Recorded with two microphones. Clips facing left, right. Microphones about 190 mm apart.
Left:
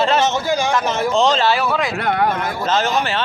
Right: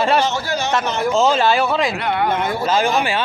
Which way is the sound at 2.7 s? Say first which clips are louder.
Even; 10° right (ahead or behind).